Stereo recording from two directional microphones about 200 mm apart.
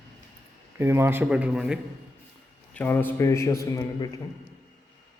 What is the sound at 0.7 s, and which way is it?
Speech, 10° right (ahead or behind).